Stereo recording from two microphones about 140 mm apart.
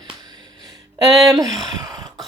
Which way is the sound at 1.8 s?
25° right (ahead or behind).